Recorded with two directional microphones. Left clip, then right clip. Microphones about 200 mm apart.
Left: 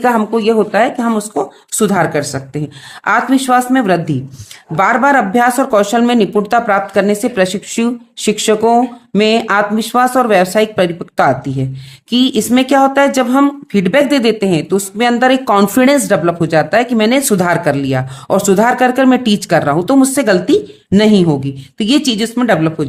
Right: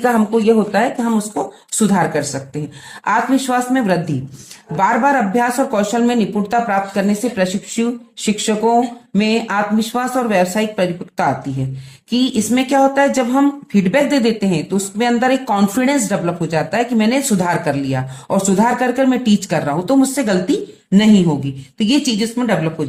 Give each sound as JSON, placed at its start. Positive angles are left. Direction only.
{"t": 0.0, "sound": "speech", "side_deg": 35}